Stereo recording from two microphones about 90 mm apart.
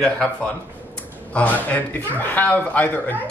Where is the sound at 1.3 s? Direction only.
20° left (ahead or behind).